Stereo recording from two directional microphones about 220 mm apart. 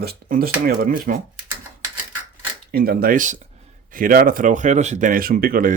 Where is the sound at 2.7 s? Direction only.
45° right (ahead or behind).